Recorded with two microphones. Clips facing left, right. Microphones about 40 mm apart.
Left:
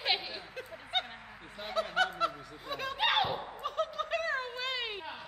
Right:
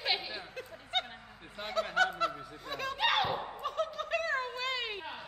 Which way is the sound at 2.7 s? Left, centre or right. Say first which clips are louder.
Even; centre.